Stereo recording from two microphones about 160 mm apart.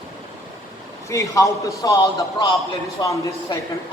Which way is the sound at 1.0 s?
20° left (ahead or behind).